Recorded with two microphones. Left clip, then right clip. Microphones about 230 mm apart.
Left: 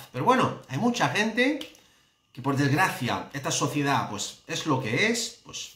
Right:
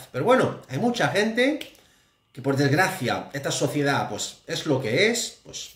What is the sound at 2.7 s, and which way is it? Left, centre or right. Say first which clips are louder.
Speech: right 2 dB; left.